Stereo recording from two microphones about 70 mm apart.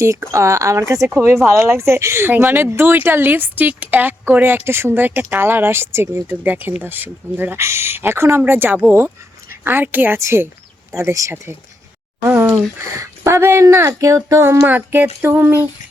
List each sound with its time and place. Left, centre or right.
0.0 s speech: right
10.2 s speech: right
12.3 s a sound: right
13.0 s speech: right
14.7 s speech: right